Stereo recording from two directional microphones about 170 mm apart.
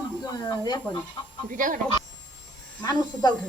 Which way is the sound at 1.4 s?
50° right (ahead or behind).